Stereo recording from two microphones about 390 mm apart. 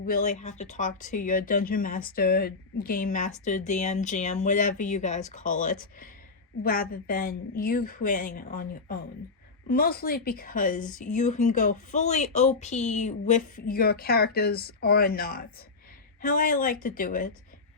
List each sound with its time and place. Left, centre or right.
0.0 s speech: left